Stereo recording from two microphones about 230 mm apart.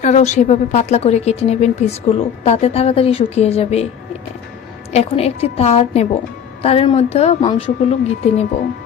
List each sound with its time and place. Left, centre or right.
0.0 s a woman's voice: left
4.9 s a woman's voice: left